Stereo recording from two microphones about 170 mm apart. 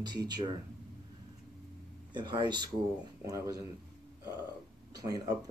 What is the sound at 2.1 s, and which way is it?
Speech, 25° right (ahead or behind).